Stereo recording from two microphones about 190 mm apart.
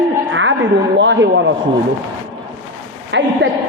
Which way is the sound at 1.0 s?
75° right (ahead or behind).